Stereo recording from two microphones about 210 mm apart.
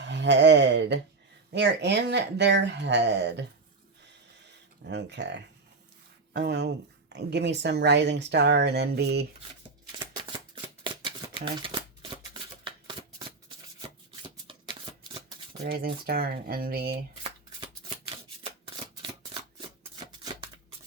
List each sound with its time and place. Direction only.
0.0 s speech: 55° right (ahead or behind)
4.9 s speech: 55° right (ahead or behind)
10.0 s shuffling cards: 20° right (ahead or behind)
15.6 s speech: 45° right (ahead or behind)
18.6 s shuffling cards: 25° right (ahead or behind)